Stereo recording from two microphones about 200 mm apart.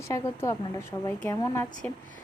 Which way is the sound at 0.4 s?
15° left (ahead or behind).